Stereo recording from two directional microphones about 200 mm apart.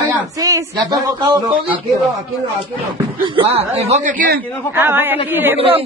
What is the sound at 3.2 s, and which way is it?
A man's voice, 25° right (ahead or behind).